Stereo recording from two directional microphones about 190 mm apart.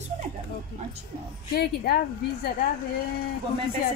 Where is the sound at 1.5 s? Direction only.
55° left (ahead or behind).